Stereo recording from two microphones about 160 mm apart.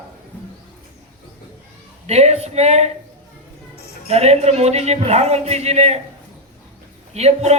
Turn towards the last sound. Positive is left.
turn(degrees=-40)  # may be behind; listen again after turning